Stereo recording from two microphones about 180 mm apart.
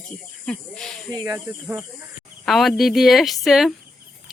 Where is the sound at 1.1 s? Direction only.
20° right (ahead or behind).